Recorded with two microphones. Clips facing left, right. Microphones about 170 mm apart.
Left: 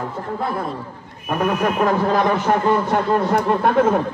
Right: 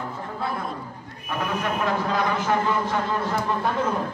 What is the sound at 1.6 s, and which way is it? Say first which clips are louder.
A man's voice: left 6 dB; 50° left (ahead or behind).